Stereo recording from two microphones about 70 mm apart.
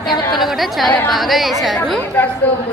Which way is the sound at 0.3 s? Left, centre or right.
Centre.